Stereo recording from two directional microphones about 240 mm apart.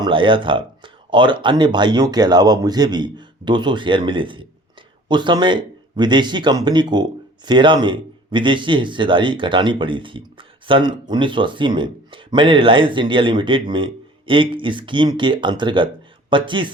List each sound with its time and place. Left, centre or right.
0.0 s speech: right